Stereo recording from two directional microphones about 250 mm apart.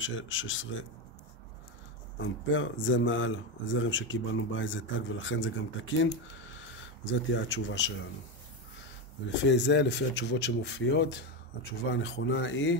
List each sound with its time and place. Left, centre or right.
0.0 s speech: left
2.1 s speech: left
9.3 s speech: left